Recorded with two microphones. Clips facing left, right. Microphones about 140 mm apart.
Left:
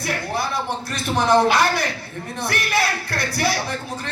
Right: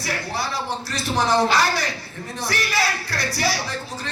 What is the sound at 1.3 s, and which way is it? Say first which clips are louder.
Speech: left 4 dB; 55° left (ahead or behind).